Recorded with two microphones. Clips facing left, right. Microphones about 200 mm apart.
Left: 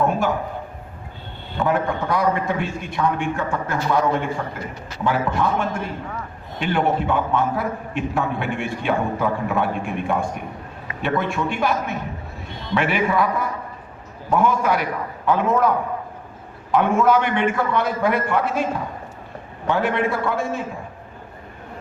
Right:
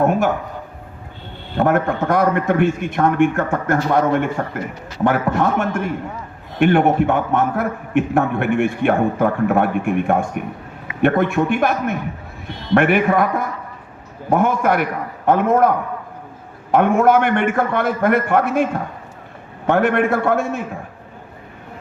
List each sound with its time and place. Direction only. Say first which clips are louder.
0.0 s a man's voice: right 4 dB; 55° right (ahead or behind)
1.5 s a man's voice: right 4 dB; 60° right (ahead or behind)
16.7 s a man's voice: right 3 dB; 55° right (ahead or behind)